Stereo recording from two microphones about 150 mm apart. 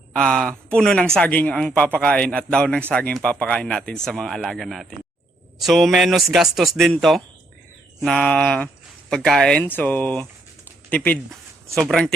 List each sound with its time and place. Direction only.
0.1 s speech: 5° left (ahead or behind)